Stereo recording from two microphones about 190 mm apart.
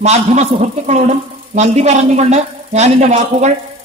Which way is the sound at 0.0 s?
35° right (ahead or behind).